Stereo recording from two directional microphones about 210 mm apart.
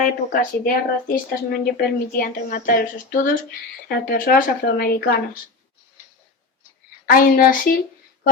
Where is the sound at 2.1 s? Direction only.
45° left (ahead or behind).